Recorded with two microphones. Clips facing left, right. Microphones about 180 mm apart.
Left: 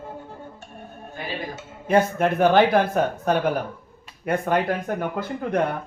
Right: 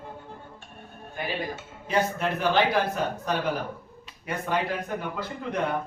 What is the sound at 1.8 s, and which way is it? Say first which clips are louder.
Speech: left 6 dB; 55° left (ahead or behind).